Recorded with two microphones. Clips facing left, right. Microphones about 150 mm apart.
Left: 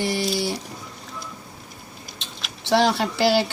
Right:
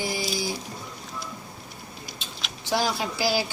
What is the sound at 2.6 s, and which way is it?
Speech, 75° left (ahead or behind).